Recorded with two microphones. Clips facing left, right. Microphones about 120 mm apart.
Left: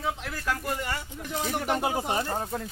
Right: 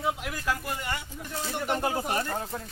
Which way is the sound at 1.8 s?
20° left (ahead or behind).